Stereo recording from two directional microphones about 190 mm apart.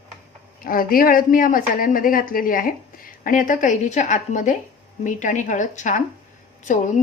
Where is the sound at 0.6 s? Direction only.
50° left (ahead or behind).